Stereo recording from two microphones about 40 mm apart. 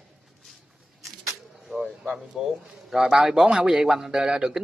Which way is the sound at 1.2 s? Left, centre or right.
Centre.